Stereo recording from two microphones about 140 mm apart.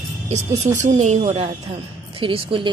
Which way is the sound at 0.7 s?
60° right (ahead or behind).